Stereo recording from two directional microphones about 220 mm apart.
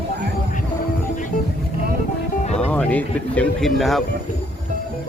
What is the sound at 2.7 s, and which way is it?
Speech, 5° left (ahead or behind).